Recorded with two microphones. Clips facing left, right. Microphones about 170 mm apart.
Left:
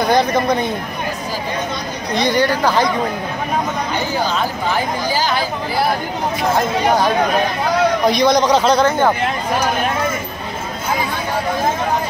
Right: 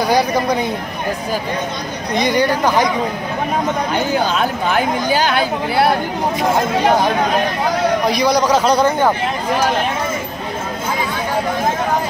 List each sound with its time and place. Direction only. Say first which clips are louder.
0.0 s a man's voice: even; 10° right (ahead or behind)
2.2 s a man's voice: even; 15° right (ahead or behind)
4.1 s speech: right 2 dB; 60° right (ahead or behind)
8.1 s a man's voice: left 1 dB; 10° right (ahead or behind)